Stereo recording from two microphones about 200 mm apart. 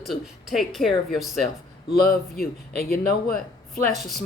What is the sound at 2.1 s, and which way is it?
Speech, 50° left (ahead or behind).